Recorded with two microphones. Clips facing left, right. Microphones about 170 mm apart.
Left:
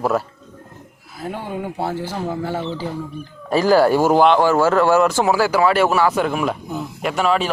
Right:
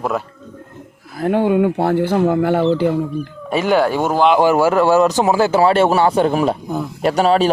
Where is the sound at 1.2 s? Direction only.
75° right (ahead or behind).